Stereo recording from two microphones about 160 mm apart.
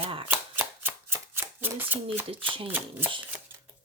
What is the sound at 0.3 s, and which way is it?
Shuffling cards, 15° right (ahead or behind).